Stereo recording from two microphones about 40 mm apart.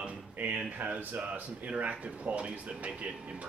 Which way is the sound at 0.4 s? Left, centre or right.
Right.